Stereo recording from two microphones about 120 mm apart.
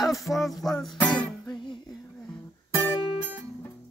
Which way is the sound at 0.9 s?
10° left (ahead or behind).